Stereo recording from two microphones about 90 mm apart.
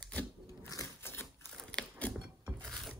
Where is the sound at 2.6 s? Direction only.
5° left (ahead or behind).